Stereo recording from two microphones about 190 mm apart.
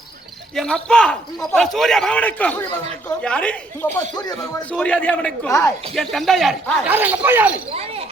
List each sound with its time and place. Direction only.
0.5 s a man's voice: 5° left (ahead or behind)
4.1 s speech: 20° left (ahead or behind)
4.7 s a man's voice: 5° left (ahead or behind); by 7.5 s 10° right (ahead or behind)
7.7 s a sound: 30° right (ahead or behind)